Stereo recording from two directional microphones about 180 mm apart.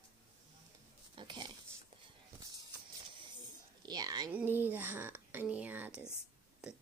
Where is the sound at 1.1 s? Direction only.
25° right (ahead or behind).